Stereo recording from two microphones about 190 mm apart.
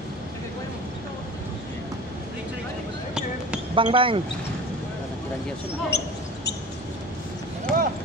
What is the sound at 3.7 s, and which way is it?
Speech, 25° right (ahead or behind).